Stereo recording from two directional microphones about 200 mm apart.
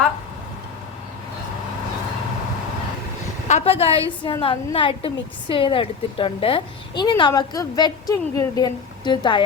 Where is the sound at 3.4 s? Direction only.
30° left (ahead or behind).